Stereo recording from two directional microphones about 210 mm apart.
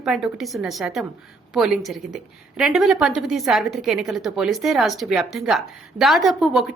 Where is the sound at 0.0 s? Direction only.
Centre (ahead or behind).